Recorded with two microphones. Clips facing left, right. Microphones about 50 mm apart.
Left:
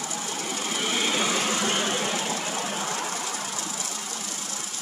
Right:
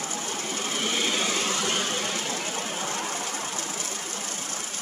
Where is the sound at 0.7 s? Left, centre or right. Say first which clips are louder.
Left 1 dB; centre.